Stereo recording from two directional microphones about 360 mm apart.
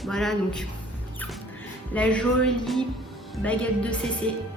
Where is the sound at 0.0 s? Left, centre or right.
Centre.